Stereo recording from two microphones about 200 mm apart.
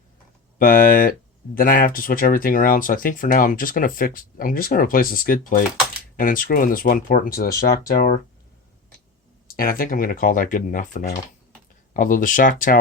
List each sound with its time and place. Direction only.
0.6 s speech: 45° left (ahead or behind)
9.5 s speech: 45° left (ahead or behind)